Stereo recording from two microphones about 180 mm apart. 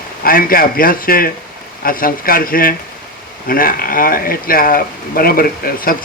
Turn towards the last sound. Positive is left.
turn(degrees=55)  # may be behind; listen again after turning